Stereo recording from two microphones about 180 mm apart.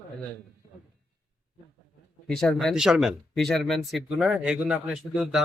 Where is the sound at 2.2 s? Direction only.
5° left (ahead or behind).